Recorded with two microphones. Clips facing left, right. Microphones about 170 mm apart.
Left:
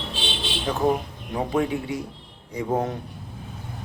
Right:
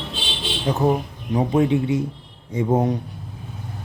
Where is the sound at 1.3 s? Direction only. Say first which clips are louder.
Right 6 dB; 20° right (ahead or behind).